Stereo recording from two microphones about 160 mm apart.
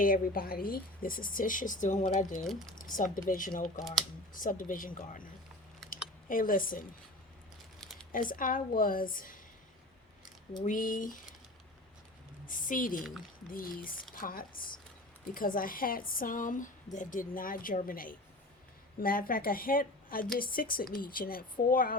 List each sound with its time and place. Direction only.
0.0 s speech: 65° left (ahead or behind)
2.4 s speech: centre (ahead or behind)
2.7 s speech: 55° left (ahead or behind)
8.1 s speech: 60° left (ahead or behind)
10.7 s speech: 60° left (ahead or behind)
12.5 s speech: 55° left (ahead or behind)